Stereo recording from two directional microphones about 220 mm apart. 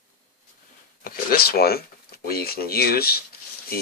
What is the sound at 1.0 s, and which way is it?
Speech, 40° left (ahead or behind).